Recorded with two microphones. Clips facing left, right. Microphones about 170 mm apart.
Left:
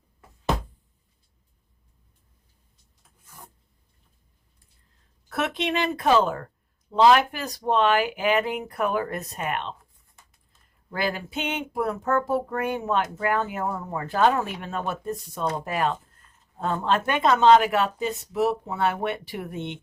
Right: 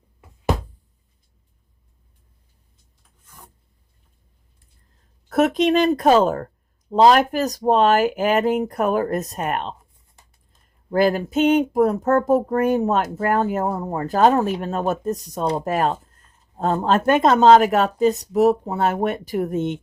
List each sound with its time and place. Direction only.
5.3 s speech: 45° right (ahead or behind)
10.8 s speech: 45° right (ahead or behind)